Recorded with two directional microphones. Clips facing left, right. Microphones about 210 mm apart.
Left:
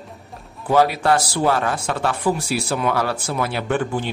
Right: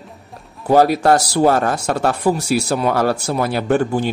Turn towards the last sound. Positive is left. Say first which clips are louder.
# right 5 dB
turn(degrees=-40)  # may be behind; listen again after turning